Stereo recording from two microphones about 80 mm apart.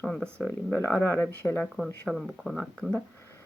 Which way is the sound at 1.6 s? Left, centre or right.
Centre.